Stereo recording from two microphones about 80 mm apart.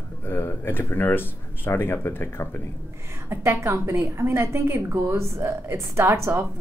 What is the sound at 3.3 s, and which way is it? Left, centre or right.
A woman's voice, right.